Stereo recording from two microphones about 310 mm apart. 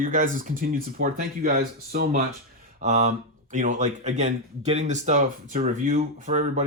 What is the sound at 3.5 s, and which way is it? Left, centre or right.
Speech, right.